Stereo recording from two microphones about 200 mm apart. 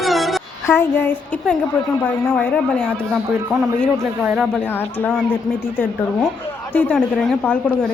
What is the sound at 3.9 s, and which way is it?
Speech, 10° right (ahead or behind).